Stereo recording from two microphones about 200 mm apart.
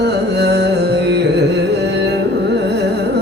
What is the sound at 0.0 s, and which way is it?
Carnatic music, 55° right (ahead or behind).